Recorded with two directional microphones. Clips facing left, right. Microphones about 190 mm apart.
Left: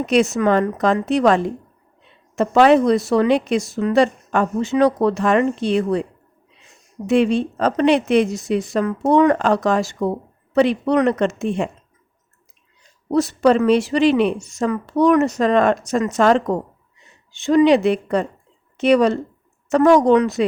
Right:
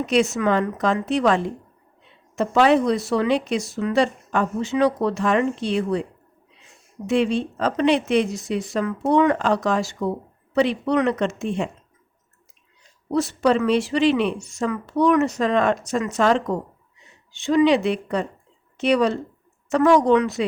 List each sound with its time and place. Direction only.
0.1 s speech: 45° left (ahead or behind)
7.1 s speech: 50° left (ahead or behind)
13.1 s speech: 40° left (ahead or behind)
17.4 s speech: 45° left (ahead or behind)